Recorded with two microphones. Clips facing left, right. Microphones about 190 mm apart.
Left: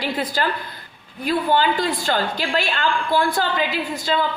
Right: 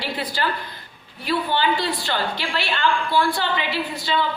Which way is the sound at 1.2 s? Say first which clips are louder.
Left 3 dB; 45° left (ahead or behind).